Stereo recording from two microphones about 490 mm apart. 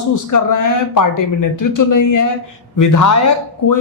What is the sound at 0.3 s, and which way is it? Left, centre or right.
Speech, left.